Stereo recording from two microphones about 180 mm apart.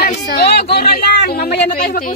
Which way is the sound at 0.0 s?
60° left (ahead or behind).